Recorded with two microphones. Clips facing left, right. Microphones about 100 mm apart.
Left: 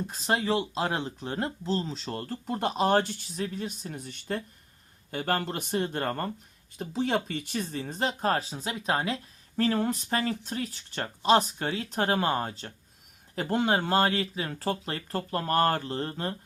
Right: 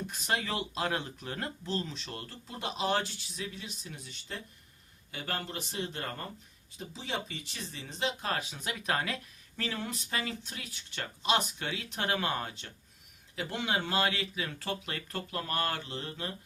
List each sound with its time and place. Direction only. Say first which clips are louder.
0.1 s speech: left 7 dB; 30° left (ahead or behind)
9.6 s speech: left 11 dB; 45° left (ahead or behind)